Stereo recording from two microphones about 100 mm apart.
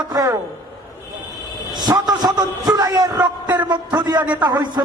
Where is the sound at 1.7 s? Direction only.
45° right (ahead or behind).